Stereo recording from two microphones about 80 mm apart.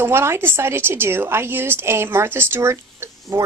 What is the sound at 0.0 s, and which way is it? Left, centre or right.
A woman's voice, right.